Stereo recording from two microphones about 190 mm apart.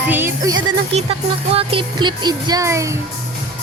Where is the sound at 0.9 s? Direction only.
30° right (ahead or behind).